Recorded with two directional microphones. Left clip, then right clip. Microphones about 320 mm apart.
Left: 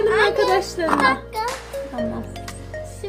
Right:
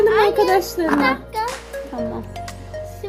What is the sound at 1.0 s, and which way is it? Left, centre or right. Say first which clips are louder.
Speech: left 1 dB; centre.